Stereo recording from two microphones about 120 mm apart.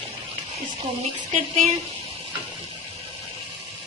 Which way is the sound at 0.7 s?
75° right (ahead or behind).